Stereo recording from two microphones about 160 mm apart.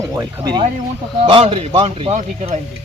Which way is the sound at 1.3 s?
35° right (ahead or behind).